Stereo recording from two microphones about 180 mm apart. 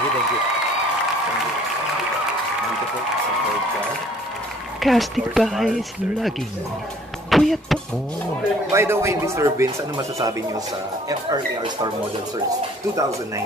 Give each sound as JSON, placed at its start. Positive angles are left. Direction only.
{"t": 4.8, "sound": "speech", "side_deg": 0}
{"t": 8.7, "sound": "speech", "side_deg": -15}